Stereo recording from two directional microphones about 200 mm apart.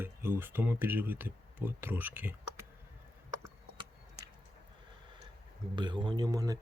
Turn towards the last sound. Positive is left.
turn(degrees=-20)  # may be behind; listen again after turning